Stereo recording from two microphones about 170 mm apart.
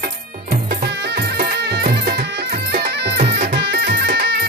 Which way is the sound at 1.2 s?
75° right (ahead or behind).